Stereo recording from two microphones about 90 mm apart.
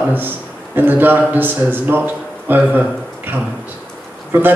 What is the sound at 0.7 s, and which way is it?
A man's voice, 20° right (ahead or behind).